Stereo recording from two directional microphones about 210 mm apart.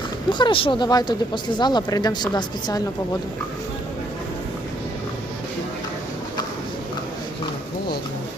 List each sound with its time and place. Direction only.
0.3 s speech: 20° left (ahead or behind)